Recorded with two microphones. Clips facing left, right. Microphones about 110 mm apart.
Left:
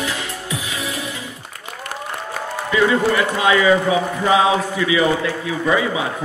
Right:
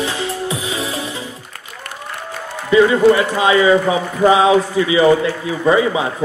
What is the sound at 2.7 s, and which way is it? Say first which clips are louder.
A man's voice: right 6 dB; 25° right (ahead or behind).